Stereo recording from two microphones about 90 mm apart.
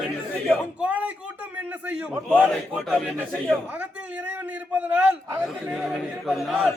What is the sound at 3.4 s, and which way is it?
A man's voice, 20° right (ahead or behind).